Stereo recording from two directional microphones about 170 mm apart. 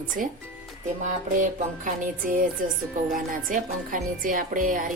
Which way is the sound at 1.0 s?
50° right (ahead or behind).